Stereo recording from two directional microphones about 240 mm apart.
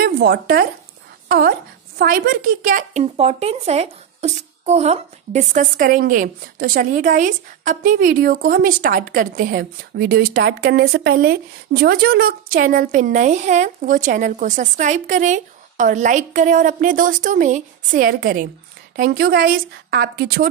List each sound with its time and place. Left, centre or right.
0.0 s speech: right
2.0 s a woman's voice: right